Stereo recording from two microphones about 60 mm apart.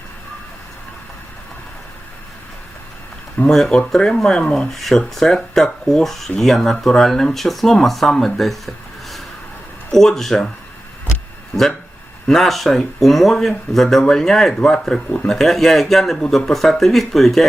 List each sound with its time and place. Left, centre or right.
3.7 s speech: centre
12.3 s speech: centre